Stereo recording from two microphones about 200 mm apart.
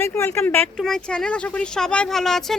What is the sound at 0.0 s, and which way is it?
Speech, 15° left (ahead or behind).